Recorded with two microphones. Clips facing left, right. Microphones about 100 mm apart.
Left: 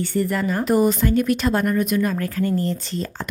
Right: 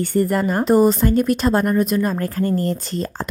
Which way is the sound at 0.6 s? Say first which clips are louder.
Right 4 dB; 35° right (ahead or behind).